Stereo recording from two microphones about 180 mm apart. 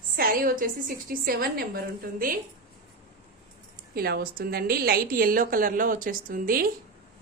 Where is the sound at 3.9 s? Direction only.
60° right (ahead or behind).